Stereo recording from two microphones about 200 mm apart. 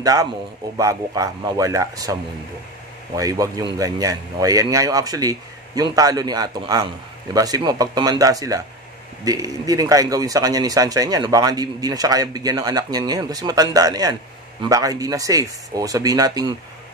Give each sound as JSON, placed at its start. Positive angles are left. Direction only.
{"t": 0.0, "sound": "speech", "side_deg": -15}
{"t": 3.2, "sound": "speech", "side_deg": -15}